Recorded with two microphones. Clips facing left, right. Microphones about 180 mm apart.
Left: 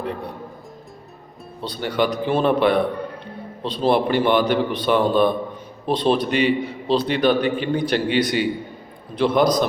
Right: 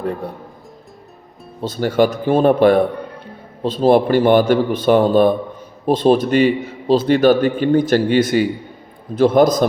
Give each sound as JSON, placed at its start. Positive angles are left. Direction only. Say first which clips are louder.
{"t": 1.6, "sound": "a man's voice", "louder": "right 6 dB", "side_deg": -45}